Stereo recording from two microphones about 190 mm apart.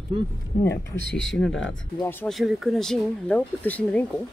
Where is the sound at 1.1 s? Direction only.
75° left (ahead or behind).